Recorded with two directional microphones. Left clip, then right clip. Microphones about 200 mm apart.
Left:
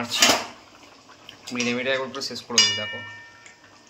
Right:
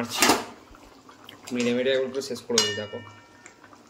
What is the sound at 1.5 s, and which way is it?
Speech, 10° right (ahead or behind).